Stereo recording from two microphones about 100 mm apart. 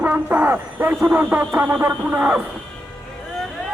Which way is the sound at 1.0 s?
20° right (ahead or behind).